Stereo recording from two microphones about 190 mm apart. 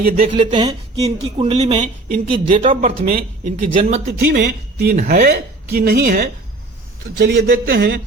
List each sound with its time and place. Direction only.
0.0 s speech: 50° right (ahead or behind)
0.3 s speech: 25° right (ahead or behind); by 3.5 s 45° right (ahead or behind)
3.8 s speech: 35° right (ahead or behind)
4.0 s speech: 55° right (ahead or behind)
4.9 s speech: 40° right (ahead or behind); by 8.0 s 60° right (ahead or behind)